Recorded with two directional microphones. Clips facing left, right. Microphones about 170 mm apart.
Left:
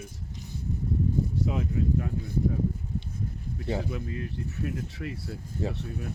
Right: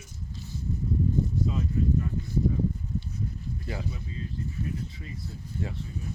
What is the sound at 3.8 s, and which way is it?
Speech, 65° left (ahead or behind).